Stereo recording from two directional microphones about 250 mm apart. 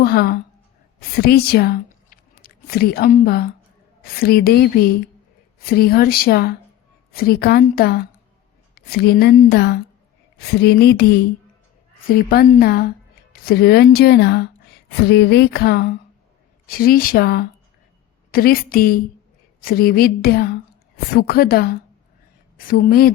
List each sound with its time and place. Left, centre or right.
0.0 s a woman's voice: left
12.3 s a woman's voice: left